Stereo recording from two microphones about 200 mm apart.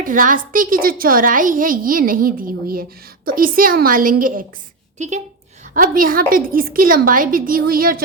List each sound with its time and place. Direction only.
0.0 s a woman's voice: 40° right (ahead or behind)